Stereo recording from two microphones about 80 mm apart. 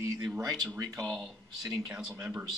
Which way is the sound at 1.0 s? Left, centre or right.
Centre.